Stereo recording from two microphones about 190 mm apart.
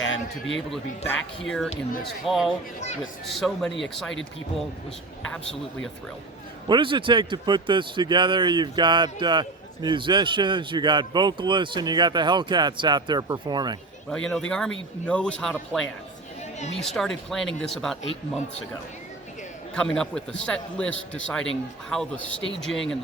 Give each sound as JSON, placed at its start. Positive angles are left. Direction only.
{"t": 0.0, "sound": "a man's voice", "side_deg": 80}
{"t": 1.5, "sound": "a man's voice", "side_deg": 0}
{"t": 6.7, "sound": "speech", "side_deg": -25}
{"t": 14.1, "sound": "a man's voice", "side_deg": 5}
{"t": 19.7, "sound": "a man's voice", "side_deg": 5}